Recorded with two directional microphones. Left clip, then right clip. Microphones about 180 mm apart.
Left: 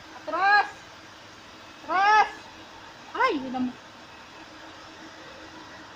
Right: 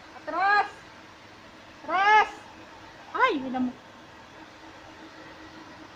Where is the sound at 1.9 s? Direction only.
5° left (ahead or behind).